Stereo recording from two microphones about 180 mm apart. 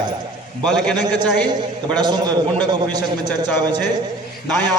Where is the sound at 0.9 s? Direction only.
25° right (ahead or behind).